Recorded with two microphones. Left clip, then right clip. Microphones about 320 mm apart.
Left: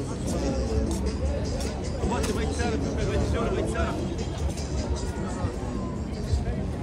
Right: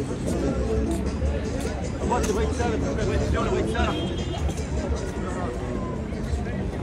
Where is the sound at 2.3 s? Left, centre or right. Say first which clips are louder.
Right 3 dB; centre.